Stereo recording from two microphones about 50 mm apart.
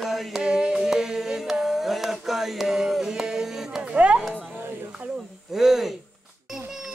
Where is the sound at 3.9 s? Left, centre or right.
Right.